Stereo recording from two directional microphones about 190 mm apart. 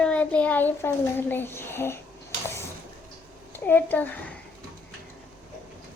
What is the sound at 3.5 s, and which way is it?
Speech, 10° left (ahead or behind).